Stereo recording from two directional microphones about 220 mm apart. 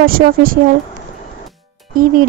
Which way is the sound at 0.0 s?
40° right (ahead or behind).